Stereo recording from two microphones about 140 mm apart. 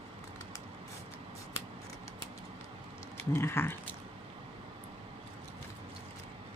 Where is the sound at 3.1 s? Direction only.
15° left (ahead or behind).